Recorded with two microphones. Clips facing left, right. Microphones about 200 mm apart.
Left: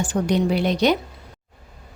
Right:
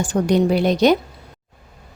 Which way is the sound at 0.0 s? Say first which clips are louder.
Right 4 dB; 45° right (ahead or behind).